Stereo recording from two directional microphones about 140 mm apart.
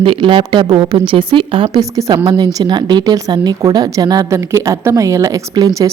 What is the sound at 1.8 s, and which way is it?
Speech, 25° right (ahead or behind).